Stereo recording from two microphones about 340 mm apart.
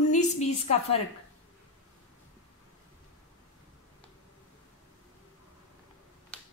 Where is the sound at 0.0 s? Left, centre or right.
Centre.